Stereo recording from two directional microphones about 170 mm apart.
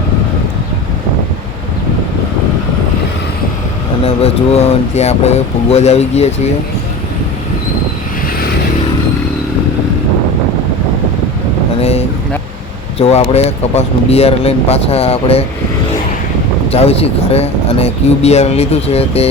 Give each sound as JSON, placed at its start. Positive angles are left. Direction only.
{"t": 4.0, "sound": "speech", "side_deg": 35}
{"t": 11.8, "sound": "vehicle", "side_deg": 40}
{"t": 13.0, "sound": "speech", "side_deg": 40}
{"t": 16.7, "sound": "speech", "side_deg": 35}